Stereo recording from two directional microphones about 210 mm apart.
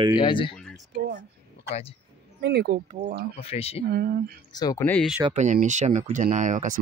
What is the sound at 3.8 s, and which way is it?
Speech, 50° right (ahead or behind).